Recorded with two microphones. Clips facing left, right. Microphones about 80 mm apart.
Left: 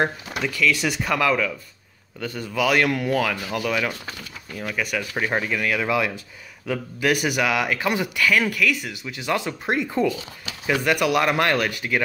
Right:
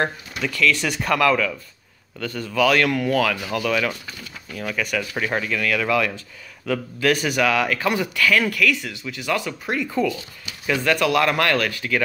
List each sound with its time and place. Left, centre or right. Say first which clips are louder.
0.4 s speech: right 1 dB; centre